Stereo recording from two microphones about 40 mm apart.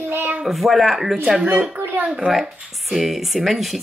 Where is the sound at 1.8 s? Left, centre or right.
Right.